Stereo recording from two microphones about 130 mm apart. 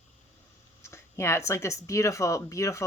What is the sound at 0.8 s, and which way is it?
Speech, 20° left (ahead or behind).